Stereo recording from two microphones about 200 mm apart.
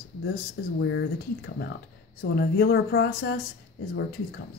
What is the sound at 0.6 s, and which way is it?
Speech, 55° left (ahead or behind).